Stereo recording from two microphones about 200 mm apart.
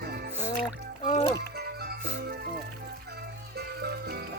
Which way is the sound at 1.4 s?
50° right (ahead or behind).